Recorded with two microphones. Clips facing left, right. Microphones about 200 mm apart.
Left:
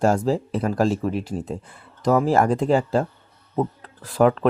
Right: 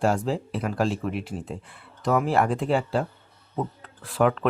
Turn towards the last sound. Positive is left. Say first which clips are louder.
# left 4 dB
turn(degrees=35)  # may be behind; listen again after turning